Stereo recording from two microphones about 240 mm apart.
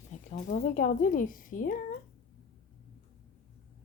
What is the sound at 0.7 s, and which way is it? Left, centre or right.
A woman's voice, left.